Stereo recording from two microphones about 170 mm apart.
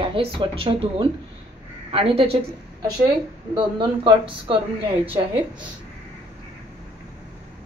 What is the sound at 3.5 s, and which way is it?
Speech, 30° right (ahead or behind).